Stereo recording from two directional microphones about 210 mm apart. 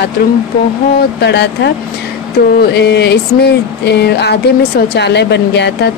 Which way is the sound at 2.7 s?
55° left (ahead or behind).